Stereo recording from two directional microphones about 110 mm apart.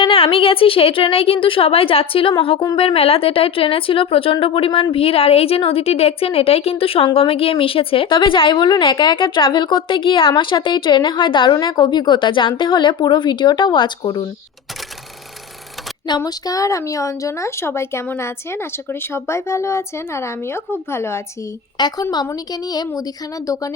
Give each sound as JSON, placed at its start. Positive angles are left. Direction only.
{"t": 0.0, "sound": "speech", "side_deg": 55}
{"t": 16.0, "sound": "speech", "side_deg": 40}
{"t": 21.8, "sound": "a woman's voice", "side_deg": 40}